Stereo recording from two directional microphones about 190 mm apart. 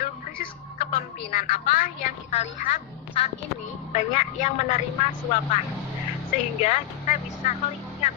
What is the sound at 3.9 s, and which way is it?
Speech, 40° left (ahead or behind).